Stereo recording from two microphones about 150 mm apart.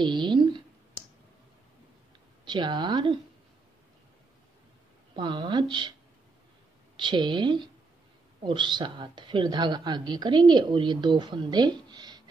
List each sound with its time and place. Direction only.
0.0 s a sound: 30° right (ahead or behind)
2.4 s a woman's voice: 30° right (ahead or behind)
5.1 s a woman's voice: 30° right (ahead or behind)
7.0 s a woman's voice: 30° right (ahead or behind)